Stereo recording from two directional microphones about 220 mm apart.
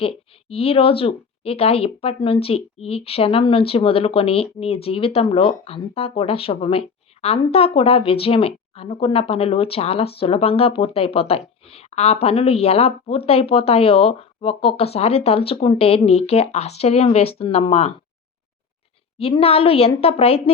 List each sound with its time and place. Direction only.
0.0 s speech: 25° left (ahead or behind)
19.2 s speech: 25° left (ahead or behind)